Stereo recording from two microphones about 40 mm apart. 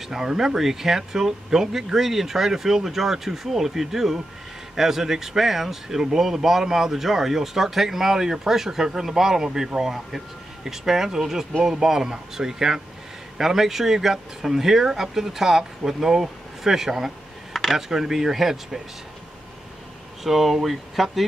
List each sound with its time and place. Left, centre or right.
0.0 s speech: centre
17.5 s a sound: centre
17.7 s speech: centre
20.2 s speech: centre